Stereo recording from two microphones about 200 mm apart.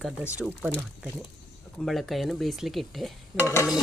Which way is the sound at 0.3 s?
5° right (ahead or behind).